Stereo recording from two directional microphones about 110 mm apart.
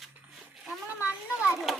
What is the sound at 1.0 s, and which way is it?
Speech, 10° right (ahead or behind).